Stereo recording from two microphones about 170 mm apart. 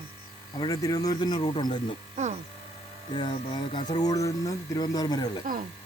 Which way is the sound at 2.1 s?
40° right (ahead or behind).